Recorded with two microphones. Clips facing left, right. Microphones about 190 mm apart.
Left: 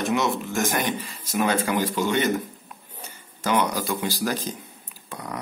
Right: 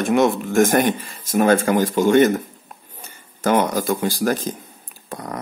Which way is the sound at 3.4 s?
50° right (ahead or behind).